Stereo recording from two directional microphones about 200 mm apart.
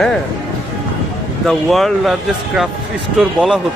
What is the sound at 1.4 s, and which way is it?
Speech, centre (ahead or behind).